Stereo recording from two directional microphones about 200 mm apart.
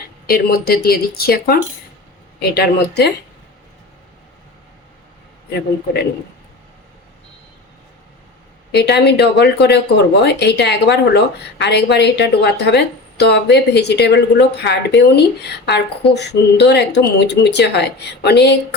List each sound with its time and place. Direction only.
0.3 s speech: 50° left (ahead or behind)
8.7 s speech: 55° left (ahead or behind)